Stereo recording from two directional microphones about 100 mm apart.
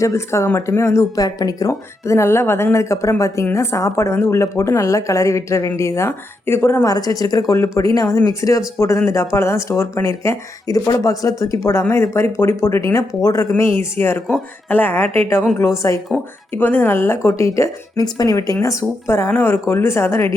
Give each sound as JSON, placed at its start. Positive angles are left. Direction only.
{"t": 0.0, "sound": "speech", "side_deg": 30}
{"t": 6.8, "sound": "speech", "side_deg": 40}